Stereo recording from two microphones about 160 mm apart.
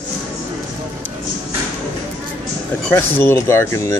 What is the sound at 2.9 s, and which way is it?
Speech, 15° left (ahead or behind).